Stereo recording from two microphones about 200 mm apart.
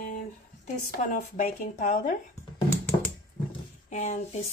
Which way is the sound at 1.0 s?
40° left (ahead or behind).